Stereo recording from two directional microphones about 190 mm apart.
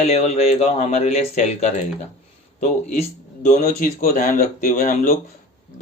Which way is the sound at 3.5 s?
40° left (ahead or behind).